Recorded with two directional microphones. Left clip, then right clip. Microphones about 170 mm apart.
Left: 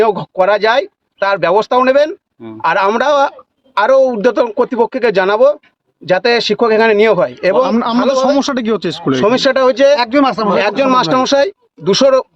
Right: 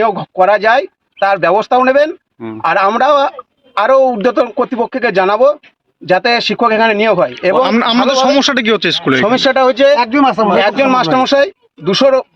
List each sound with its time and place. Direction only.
0.0 s speech: 30° left (ahead or behind)
10.1 s speech: 10° right (ahead or behind)
10.6 s speech: 35° left (ahead or behind)